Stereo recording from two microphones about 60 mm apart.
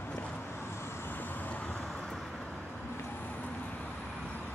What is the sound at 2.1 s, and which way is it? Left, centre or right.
Vehicle, centre.